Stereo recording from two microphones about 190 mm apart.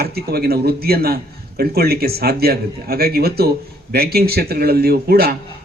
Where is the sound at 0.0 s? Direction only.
55° right (ahead or behind).